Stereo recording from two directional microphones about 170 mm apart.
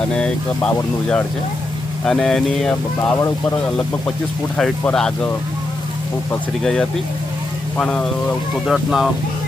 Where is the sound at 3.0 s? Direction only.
15° left (ahead or behind).